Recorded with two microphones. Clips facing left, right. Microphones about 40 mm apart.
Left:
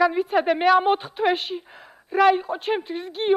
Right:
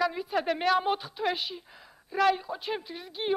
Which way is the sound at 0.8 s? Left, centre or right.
Left.